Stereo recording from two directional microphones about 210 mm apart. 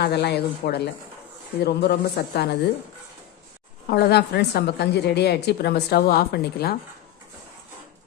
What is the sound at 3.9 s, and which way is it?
A woman's voice, 50° left (ahead or behind).